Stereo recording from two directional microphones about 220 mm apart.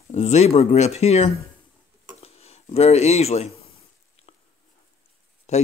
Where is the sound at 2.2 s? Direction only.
30° left (ahead or behind).